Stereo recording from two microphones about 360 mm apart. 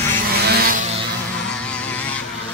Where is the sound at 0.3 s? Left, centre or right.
Right.